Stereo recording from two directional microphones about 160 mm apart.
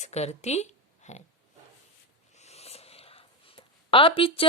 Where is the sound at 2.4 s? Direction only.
40° left (ahead or behind).